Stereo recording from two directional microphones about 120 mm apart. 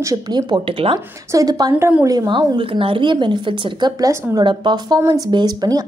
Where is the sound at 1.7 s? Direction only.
15° right (ahead or behind).